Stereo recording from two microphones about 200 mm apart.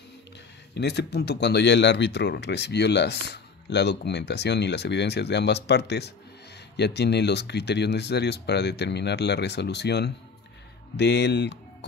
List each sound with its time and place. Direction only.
0.7 s speech: 55° left (ahead or behind)